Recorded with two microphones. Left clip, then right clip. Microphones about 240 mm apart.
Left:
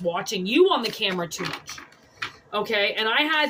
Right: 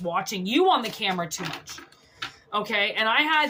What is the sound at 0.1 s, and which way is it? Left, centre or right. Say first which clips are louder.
Speech: even; right.